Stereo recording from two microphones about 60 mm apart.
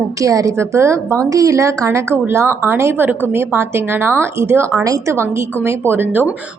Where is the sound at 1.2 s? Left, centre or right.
Right.